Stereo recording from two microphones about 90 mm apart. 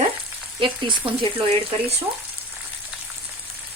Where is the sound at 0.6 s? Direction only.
70° right (ahead or behind).